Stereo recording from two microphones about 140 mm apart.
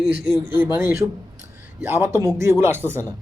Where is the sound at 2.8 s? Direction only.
10° left (ahead or behind).